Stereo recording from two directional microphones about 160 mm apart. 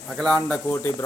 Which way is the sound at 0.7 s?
20° left (ahead or behind).